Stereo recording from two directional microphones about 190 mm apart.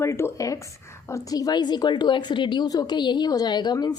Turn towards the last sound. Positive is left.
turn(degrees=20)  # may be behind; listen again after turning